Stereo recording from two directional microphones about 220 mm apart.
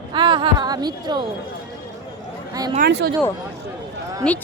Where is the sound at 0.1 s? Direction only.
20° right (ahead or behind).